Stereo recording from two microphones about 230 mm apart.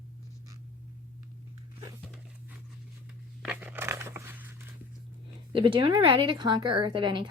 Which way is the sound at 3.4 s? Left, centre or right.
Centre.